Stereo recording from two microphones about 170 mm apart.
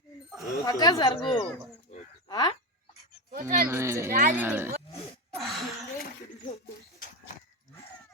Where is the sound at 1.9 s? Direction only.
40° left (ahead or behind).